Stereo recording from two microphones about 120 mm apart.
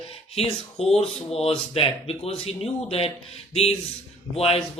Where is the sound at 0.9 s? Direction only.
55° left (ahead or behind).